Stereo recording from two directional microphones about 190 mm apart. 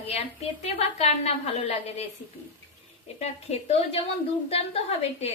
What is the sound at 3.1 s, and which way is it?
A woman's voice, 35° left (ahead or behind).